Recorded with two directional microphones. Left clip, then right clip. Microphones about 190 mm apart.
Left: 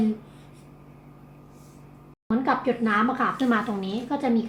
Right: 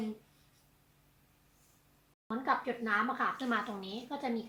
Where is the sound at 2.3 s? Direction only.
10° right (ahead or behind).